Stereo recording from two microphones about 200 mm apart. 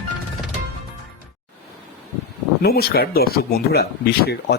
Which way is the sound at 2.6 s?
50° left (ahead or behind).